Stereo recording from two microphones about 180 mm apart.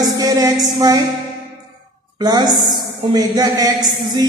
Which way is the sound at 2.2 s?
20° right (ahead or behind).